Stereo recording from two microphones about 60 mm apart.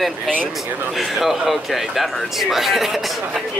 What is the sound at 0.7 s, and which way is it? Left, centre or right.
Speech, right.